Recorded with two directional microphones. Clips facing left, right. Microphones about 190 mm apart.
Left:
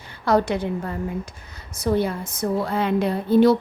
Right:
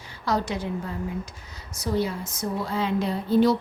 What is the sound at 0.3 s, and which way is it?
A woman's voice, 60° left (ahead or behind).